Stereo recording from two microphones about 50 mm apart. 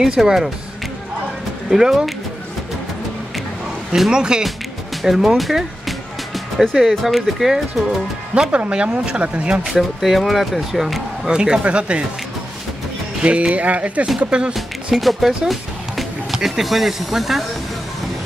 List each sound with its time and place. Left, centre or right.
0.0 s speech: centre
1.7 s speech: centre
4.1 s speech: centre
5.0 s music: centre
7.0 s speech: centre
8.5 s speech: right
9.7 s speech: centre
11.3 s speech: centre
13.2 s speech: right
14.5 s speech: centre